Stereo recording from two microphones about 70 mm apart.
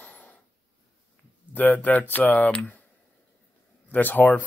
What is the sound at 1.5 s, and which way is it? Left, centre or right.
Speech, left.